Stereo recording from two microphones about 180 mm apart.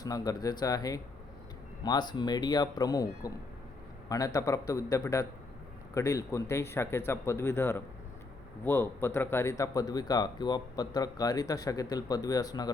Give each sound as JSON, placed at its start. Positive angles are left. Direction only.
{"t": 0.0, "sound": "speech", "side_deg": 20}